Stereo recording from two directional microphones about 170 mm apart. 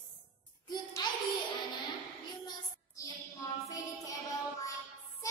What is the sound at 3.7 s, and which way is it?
Music, 20° left (ahead or behind).